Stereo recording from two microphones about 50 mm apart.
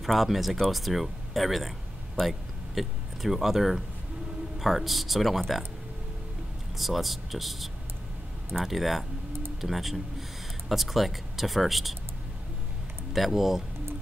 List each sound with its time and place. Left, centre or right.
0.0 s speech: centre
6.8 s speech: centre
13.1 s speech: centre